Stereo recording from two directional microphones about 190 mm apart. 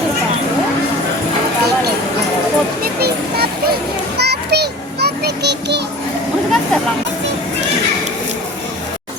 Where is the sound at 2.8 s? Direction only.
55° right (ahead or behind).